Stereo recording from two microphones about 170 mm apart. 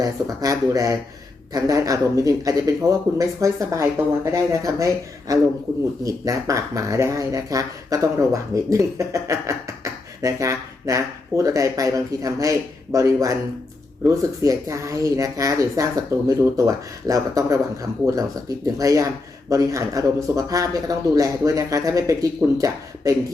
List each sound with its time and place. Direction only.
0.0 s speech: 20° right (ahead or behind)